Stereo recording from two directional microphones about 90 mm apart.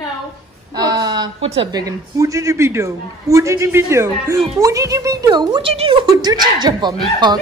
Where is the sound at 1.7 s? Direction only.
45° right (ahead or behind).